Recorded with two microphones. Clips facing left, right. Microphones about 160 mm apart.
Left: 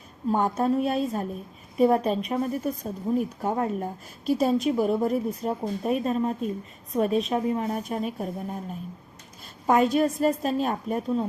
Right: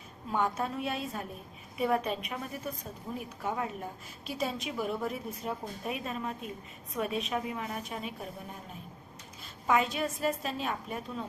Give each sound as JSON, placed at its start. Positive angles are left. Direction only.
{"t": 0.3, "sound": "a woman's voice", "side_deg": 40}
{"t": 9.6, "sound": "a woman's voice", "side_deg": 45}